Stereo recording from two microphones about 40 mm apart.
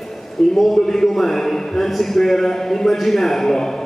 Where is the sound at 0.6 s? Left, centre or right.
Centre.